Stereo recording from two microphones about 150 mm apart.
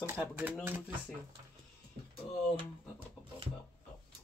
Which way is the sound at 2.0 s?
70° right (ahead or behind).